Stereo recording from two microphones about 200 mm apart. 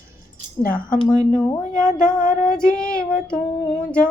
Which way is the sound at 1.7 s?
40° left (ahead or behind).